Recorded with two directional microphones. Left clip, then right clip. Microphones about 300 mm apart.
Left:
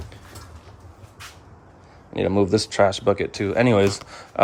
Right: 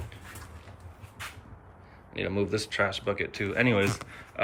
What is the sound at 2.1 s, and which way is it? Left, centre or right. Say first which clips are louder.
Speech: left 10 dB; centre.